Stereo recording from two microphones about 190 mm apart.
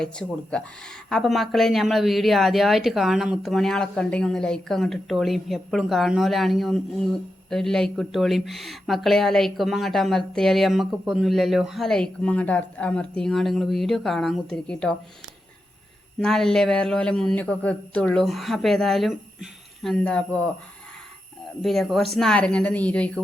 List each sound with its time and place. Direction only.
0.0 s speech: 5° left (ahead or behind)
16.1 s speech: centre (ahead or behind)
21.6 s speech: centre (ahead or behind)